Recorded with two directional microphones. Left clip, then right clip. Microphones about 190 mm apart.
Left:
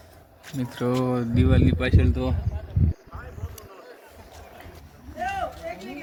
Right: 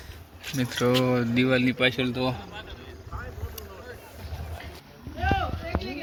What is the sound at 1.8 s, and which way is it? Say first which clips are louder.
Speech: right 2 dB; 25° left (ahead or behind).